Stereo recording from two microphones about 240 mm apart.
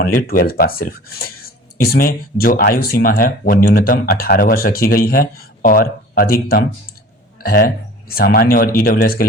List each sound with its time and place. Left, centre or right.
0.2 s speech: left